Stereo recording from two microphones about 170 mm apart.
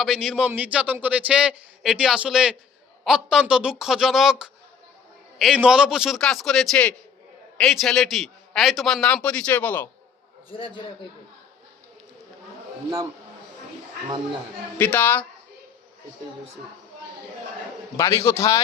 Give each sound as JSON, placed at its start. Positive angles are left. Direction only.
{"t": 0.0, "sound": "speech", "side_deg": 0}
{"t": 14.8, "sound": "a man's voice", "side_deg": 10}
{"t": 17.9, "sound": "a man's voice", "side_deg": 15}